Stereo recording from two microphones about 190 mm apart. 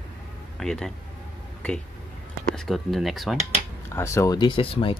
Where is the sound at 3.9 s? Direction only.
15° left (ahead or behind).